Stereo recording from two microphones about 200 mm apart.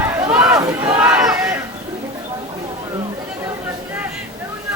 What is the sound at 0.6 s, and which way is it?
Speech, 15° right (ahead or behind).